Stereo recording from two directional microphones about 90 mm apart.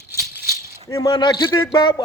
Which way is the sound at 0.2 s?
35° right (ahead or behind).